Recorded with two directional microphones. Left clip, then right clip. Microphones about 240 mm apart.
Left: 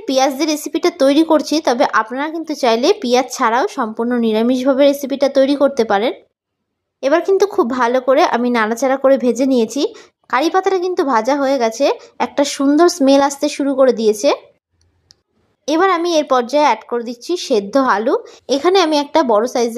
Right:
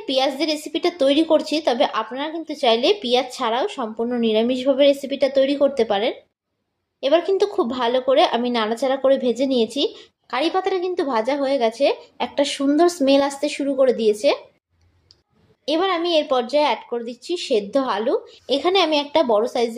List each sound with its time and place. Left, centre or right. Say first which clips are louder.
0.0 s a woman's voice: left 5 dB; left
15.6 s speech: left 6 dB; left